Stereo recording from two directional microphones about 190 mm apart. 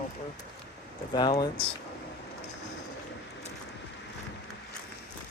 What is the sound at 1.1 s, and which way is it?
Speech, 20° left (ahead or behind).